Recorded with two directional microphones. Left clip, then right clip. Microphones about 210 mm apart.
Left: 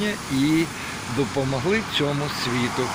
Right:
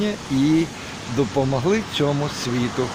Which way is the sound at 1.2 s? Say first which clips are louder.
Right 4 dB; 15° right (ahead or behind).